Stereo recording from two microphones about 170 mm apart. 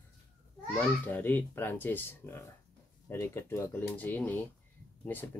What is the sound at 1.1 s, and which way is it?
Speech, 10° left (ahead or behind).